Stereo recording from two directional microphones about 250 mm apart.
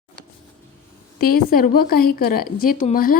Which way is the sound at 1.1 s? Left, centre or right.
Left.